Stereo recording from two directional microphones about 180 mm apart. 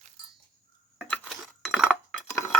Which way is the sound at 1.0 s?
5° left (ahead or behind).